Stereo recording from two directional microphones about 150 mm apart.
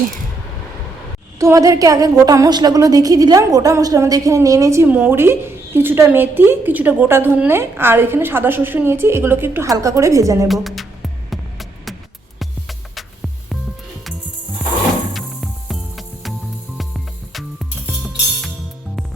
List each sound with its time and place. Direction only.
1.4 s a woman's voice: 20° right (ahead or behind)
10.5 s speech: centre (ahead or behind)
15.1 s music: centre (ahead or behind)